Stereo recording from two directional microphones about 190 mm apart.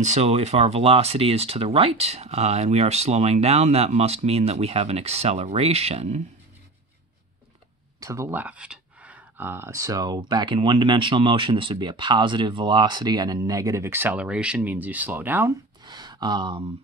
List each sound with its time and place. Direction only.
0.0 s speech: 35° right (ahead or behind)
8.0 s speech: 15° right (ahead or behind)
15.8 s a sound: 20° right (ahead or behind)